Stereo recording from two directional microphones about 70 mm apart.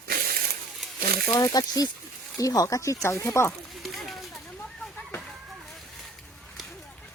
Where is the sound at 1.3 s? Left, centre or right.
Left.